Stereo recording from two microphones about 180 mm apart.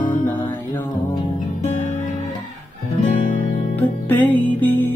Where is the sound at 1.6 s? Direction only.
45° left (ahead or behind).